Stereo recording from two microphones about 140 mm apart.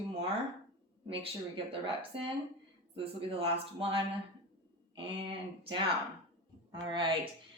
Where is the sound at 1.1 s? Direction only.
40° right (ahead or behind).